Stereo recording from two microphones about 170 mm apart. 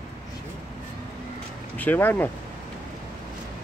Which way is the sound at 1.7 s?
10° left (ahead or behind).